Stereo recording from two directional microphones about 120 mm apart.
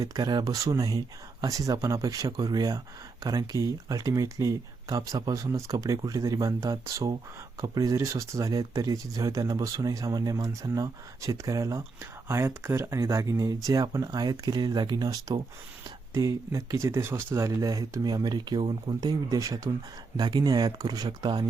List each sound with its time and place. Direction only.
0.0 s speech: 30° right (ahead or behind)
16.8 s speech: 25° right (ahead or behind)